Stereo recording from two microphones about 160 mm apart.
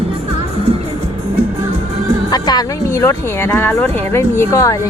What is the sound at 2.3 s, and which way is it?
A woman's voice, 25° left (ahead or behind).